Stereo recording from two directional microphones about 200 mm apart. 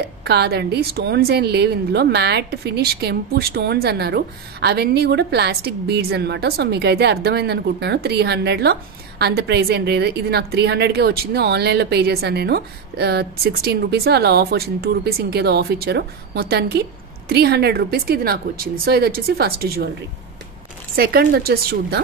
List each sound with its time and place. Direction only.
0.2 s a woman's voice: 55° right (ahead or behind)
20.9 s a woman's voice: 50° right (ahead or behind)